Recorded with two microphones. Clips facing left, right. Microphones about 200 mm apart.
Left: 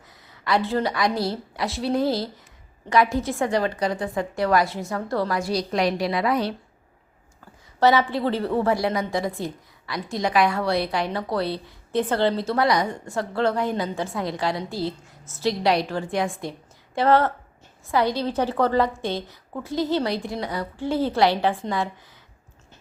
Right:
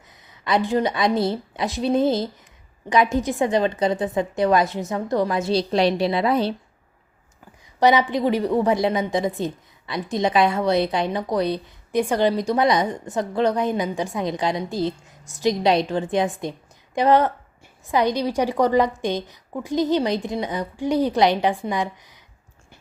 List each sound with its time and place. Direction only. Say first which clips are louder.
0.4 s a woman's voice: right 2 dB; 20° right (ahead or behind)
7.8 s a woman's voice: right 2 dB; 15° right (ahead or behind)